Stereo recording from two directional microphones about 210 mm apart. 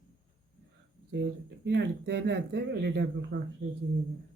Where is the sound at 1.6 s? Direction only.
55° right (ahead or behind).